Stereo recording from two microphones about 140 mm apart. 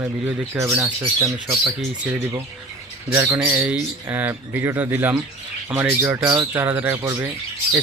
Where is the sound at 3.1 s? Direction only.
15° right (ahead or behind).